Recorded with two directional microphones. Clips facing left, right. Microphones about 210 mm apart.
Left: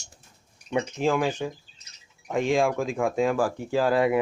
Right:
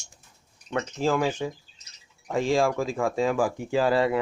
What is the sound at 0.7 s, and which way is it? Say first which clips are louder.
Speech: left 2 dB; 10° left (ahead or behind).